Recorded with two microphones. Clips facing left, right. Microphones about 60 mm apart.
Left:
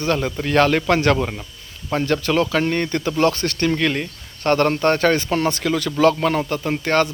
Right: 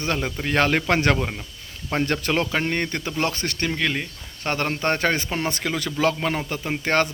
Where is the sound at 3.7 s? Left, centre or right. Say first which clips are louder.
Left 5 dB; centre.